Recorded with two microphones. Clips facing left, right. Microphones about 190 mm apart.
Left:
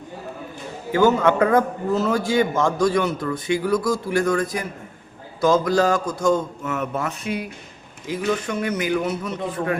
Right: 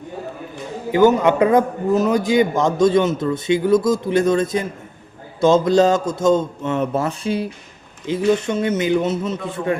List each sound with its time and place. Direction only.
0.9 s a man's voice: 20° right (ahead or behind)